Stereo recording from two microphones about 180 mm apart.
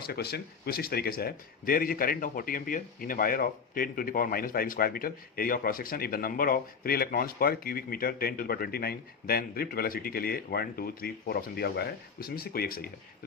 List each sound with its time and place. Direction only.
0.0 s speech: 60° left (ahead or behind)